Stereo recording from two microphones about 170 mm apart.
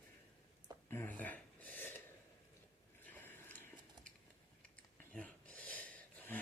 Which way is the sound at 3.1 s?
10° left (ahead or behind).